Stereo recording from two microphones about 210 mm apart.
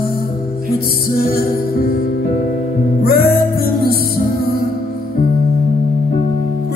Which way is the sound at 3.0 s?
50° left (ahead or behind).